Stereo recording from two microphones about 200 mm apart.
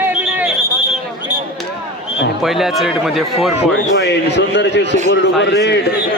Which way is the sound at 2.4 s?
Centre (ahead or behind).